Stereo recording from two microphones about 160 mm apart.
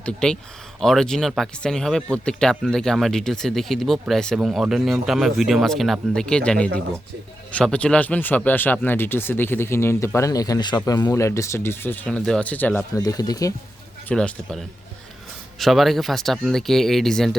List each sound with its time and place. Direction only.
0.0 s speech: 5° left (ahead or behind)
13.0 s speech: 25° left (ahead or behind)
14.1 s speech: 5° left (ahead or behind)